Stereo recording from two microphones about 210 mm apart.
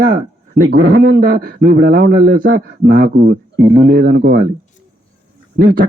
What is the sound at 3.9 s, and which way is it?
Speech, 50° right (ahead or behind).